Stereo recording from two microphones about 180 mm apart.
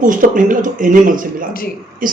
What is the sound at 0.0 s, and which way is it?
Speech, 45° right (ahead or behind).